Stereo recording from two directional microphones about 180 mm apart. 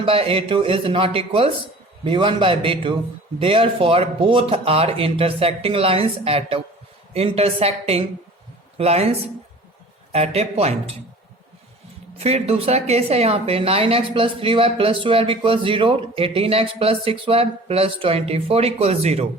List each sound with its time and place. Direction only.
0.0 s a woman's voice: 30° right (ahead or behind)
12.1 s a woman's voice: 35° right (ahead or behind)